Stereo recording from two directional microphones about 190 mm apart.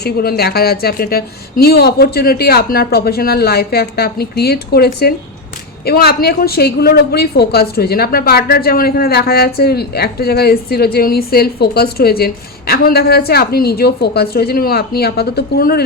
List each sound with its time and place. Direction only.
0.0 s a woman's voice: 55° left (ahead or behind)